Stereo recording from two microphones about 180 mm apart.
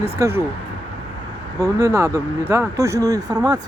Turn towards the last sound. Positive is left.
turn(degrees=-20)  # may be behind; listen again after turning